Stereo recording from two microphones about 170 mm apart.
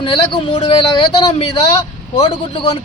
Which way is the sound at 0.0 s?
30° left (ahead or behind).